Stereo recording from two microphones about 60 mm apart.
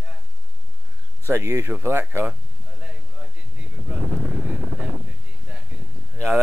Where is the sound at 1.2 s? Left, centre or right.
Right.